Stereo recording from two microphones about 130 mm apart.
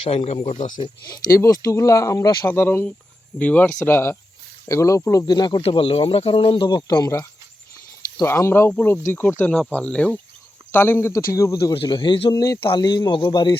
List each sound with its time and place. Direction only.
0.3 s speech: 55° left (ahead or behind)
1.3 s speech: 20° left (ahead or behind)
2.5 s speech: 15° left (ahead or behind)
5.2 s speech: 35° left (ahead or behind)
5.6 s speech: 45° left (ahead or behind); by 11.5 s 25° left (ahead or behind)
11.7 s speech: 40° left (ahead or behind)
12.3 s speech: 25° left (ahead or behind)